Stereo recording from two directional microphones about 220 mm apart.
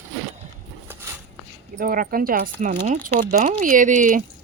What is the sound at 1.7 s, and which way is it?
Speech, 40° right (ahead or behind).